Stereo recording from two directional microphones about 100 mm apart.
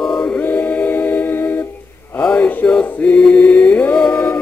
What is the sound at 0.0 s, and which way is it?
Choir, 5° left (ahead or behind).